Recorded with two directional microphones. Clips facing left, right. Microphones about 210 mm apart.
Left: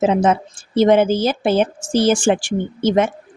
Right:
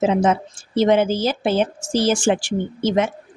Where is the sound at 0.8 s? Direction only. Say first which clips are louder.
Left 3 dB; 55° left (ahead or behind).